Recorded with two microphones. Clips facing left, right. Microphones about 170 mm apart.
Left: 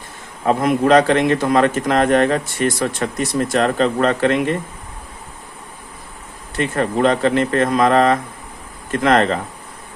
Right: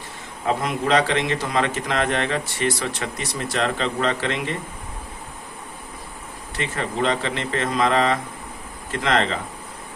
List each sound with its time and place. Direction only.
0.4 s a man's voice: 50° left (ahead or behind)
6.6 s a man's voice: 50° left (ahead or behind)